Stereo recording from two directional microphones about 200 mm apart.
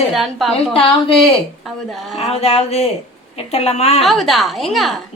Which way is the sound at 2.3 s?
30° left (ahead or behind).